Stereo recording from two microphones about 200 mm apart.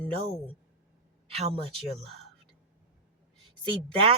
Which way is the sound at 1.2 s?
30° right (ahead or behind).